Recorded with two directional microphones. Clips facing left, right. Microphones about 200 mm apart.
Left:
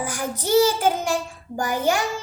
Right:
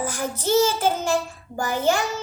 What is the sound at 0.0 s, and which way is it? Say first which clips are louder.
Child singing: right 1 dB; 10° left (ahead or behind).